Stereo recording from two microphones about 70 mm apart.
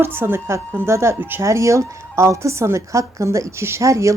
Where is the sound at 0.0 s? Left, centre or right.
Right.